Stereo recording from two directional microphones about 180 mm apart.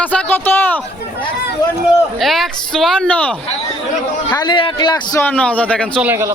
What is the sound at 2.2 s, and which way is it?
Speech, centre (ahead or behind).